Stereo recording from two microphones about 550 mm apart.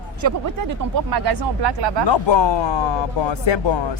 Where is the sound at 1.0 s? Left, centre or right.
Right.